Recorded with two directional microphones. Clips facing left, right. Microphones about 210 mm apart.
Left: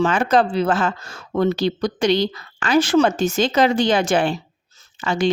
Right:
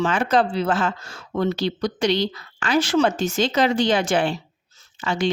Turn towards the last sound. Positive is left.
turn(degrees=45)  # may be behind; listen again after turning